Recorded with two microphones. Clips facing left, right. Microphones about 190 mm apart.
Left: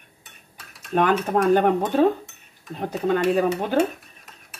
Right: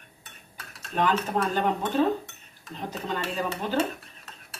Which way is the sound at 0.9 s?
60° left (ahead or behind).